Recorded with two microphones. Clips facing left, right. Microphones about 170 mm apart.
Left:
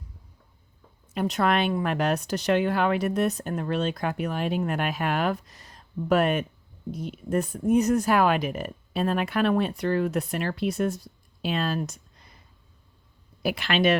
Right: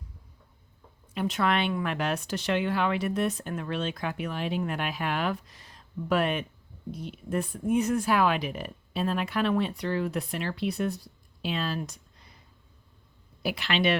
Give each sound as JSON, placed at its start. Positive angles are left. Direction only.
{"t": 1.1, "sound": "speech", "side_deg": 40}
{"t": 13.4, "sound": "speech", "side_deg": 50}